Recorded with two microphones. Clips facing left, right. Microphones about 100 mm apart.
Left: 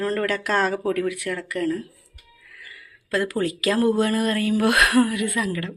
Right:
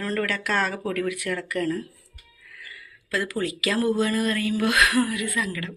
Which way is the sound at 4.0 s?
45° left (ahead or behind).